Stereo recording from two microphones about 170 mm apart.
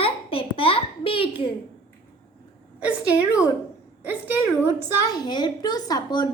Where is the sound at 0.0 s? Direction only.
35° left (ahead or behind).